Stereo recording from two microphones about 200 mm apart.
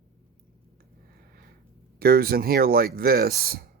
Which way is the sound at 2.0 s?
50° right (ahead or behind).